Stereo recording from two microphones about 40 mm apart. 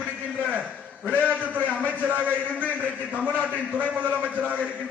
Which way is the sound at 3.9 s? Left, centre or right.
Right.